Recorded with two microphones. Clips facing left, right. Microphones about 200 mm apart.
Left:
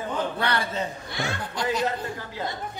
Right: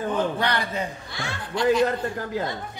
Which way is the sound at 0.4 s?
15° right (ahead or behind).